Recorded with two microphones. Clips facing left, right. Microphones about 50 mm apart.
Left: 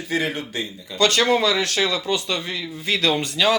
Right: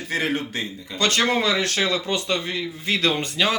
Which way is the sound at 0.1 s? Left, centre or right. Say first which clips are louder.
Even; right.